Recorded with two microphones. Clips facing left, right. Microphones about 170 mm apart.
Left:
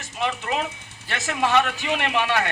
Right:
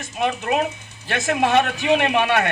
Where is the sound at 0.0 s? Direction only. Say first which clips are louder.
Right 4 dB; 55° right (ahead or behind).